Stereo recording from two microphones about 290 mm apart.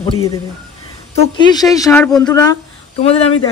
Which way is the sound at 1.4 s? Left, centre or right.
Centre.